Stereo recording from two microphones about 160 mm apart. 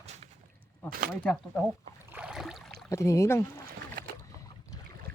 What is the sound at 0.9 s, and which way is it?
Speech, 60° right (ahead or behind).